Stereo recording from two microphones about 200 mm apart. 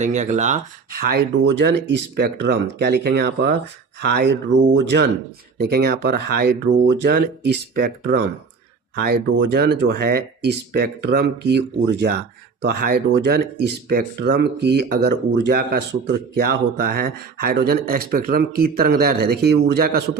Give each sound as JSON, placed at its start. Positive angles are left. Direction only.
{"t": 0.0, "sound": "speech", "side_deg": -35}
{"t": 5.5, "sound": "speech", "side_deg": -50}